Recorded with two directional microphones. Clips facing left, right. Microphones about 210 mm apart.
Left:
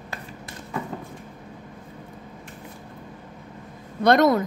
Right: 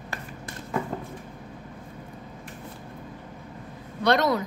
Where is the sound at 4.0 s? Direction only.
50° left (ahead or behind).